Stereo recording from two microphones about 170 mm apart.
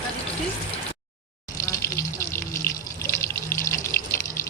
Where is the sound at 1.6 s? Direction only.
15° left (ahead or behind).